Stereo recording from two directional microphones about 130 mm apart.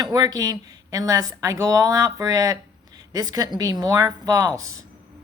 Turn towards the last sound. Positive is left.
turn(degrees=-25)  # may be behind; listen again after turning